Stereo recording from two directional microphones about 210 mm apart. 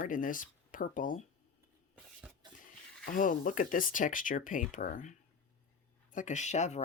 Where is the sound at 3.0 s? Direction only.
40° left (ahead or behind).